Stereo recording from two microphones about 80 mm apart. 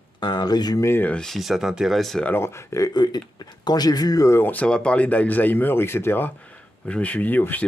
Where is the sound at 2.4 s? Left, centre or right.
Left.